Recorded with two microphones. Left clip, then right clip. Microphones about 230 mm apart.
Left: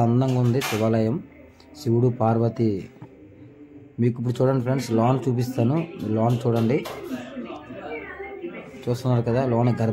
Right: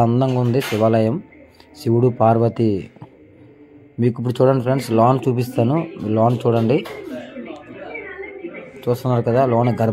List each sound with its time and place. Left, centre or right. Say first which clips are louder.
0.0 s speech: right 5 dB; centre
4.0 s speech: right 6 dB; centre
8.8 s speech: right 6 dB; centre